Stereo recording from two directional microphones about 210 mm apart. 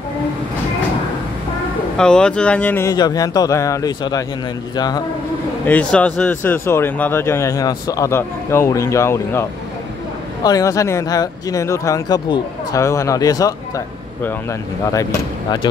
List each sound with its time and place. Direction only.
2.0 s speech: 5° left (ahead or behind)
5.7 s speech: 5° left (ahead or behind)